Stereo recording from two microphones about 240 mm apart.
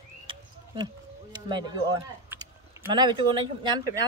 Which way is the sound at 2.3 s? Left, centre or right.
Centre.